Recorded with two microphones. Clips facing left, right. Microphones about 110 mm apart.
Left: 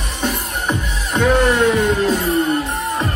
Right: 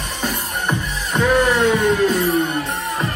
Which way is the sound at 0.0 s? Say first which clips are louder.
Left 2 dB; centre (ahead or behind).